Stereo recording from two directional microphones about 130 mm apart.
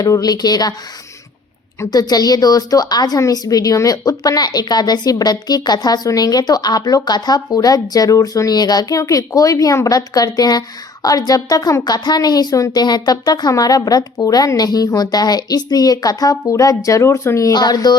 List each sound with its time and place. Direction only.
0.0 s a woman's voice: 30° left (ahead or behind)
1.8 s a woman's voice: 30° left (ahead or behind)